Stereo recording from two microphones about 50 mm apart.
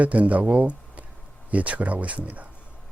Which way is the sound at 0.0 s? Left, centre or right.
Right.